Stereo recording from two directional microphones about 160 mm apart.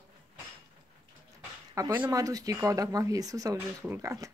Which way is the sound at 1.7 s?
25° right (ahead or behind).